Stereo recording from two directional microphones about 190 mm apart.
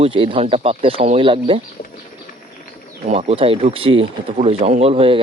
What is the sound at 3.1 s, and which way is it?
A man's voice, 30° right (ahead or behind).